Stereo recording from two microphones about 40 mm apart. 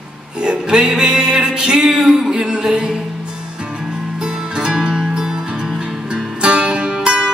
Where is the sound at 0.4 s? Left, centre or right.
Centre.